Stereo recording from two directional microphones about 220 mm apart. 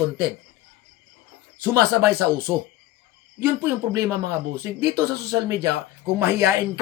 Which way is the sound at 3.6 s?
15° right (ahead or behind).